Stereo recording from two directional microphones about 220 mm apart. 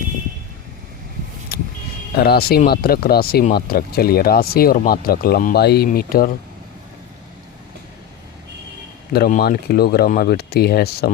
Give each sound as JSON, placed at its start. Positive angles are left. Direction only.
{"t": 1.5, "sound": "vehicle", "side_deg": 45}
{"t": 2.1, "sound": "speech", "side_deg": 45}
{"t": 9.1, "sound": "speech", "side_deg": 45}